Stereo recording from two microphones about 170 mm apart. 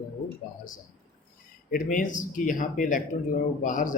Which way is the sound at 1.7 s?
50° left (ahead or behind).